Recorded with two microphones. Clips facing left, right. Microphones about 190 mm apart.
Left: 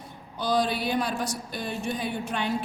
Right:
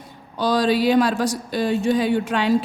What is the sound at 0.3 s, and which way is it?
A woman's voice, 90° right.